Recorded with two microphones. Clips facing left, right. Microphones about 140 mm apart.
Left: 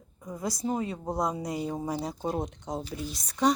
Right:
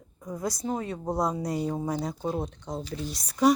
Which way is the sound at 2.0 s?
20° left (ahead or behind).